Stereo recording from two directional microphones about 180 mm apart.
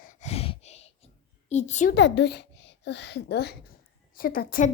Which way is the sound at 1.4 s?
40° left (ahead or behind).